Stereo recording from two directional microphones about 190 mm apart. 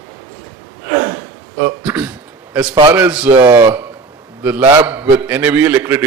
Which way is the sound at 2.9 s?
10° right (ahead or behind).